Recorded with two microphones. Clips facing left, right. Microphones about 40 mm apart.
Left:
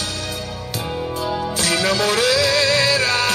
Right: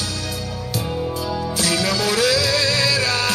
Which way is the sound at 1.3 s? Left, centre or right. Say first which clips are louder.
Left 2 dB; left.